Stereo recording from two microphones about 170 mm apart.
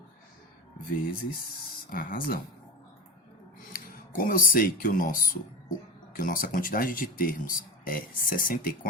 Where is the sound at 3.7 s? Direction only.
55° left (ahead or behind).